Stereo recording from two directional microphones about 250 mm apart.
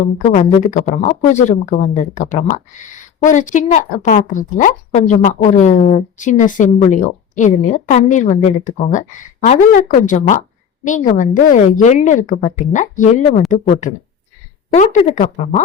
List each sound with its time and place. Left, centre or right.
0.2 s a woman's voice: left